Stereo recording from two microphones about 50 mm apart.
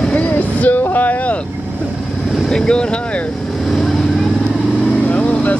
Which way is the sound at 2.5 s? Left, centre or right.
Centre.